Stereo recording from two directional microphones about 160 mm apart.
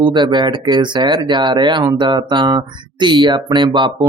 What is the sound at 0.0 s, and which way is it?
Speech, 30° right (ahead or behind).